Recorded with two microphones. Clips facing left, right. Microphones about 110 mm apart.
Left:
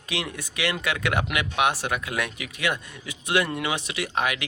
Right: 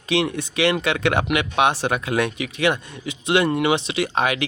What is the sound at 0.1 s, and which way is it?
Speech, 25° right (ahead or behind).